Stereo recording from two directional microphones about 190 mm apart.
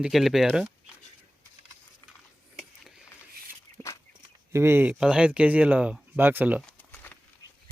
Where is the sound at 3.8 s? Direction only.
10° left (ahead or behind).